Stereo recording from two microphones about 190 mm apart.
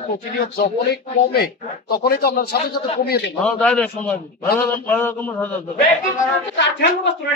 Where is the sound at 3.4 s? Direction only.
5° left (ahead or behind).